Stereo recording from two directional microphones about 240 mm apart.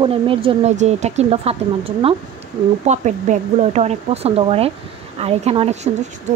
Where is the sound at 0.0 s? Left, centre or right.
Right.